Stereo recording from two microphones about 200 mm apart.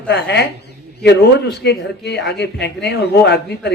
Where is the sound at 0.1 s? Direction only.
55° left (ahead or behind).